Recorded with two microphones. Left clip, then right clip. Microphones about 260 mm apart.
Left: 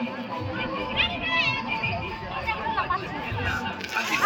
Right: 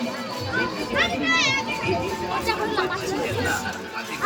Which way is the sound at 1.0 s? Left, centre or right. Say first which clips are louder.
Right 4 dB; centre.